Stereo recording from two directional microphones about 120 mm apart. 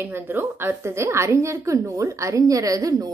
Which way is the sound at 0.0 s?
15° right (ahead or behind).